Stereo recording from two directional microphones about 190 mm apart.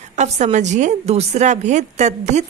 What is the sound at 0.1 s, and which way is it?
A woman's voice, 35° right (ahead or behind).